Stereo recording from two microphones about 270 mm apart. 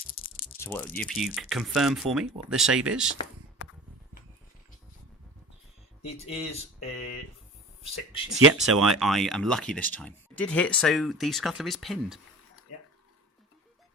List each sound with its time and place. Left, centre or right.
0.6 s speech: centre
6.8 s speech: left
8.4 s speech: right
9.0 s speech: centre